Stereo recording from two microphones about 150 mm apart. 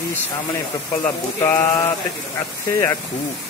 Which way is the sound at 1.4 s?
15° left (ahead or behind).